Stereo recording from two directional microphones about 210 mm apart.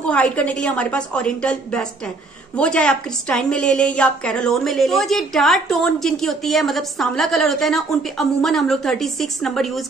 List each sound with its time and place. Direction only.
0.0 s a woman's voice: 5° left (ahead or behind)